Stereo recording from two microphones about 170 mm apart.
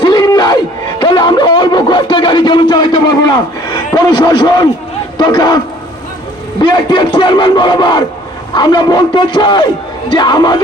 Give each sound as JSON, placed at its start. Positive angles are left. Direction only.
{"t": 0.0, "sound": "a sound", "side_deg": 25}
{"t": 5.1, "sound": "a man's voice", "side_deg": 25}
{"t": 6.6, "sound": "a man's voice", "side_deg": 25}